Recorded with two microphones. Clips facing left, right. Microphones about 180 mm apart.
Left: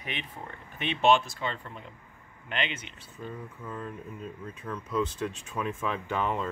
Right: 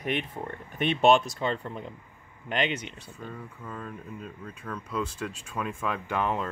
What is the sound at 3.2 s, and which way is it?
Speech, 10° left (ahead or behind).